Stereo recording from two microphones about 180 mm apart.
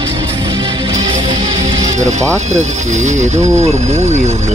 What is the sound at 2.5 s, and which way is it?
Speech, 40° right (ahead or behind).